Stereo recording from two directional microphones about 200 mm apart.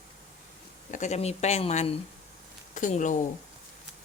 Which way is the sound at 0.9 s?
35° left (ahead or behind).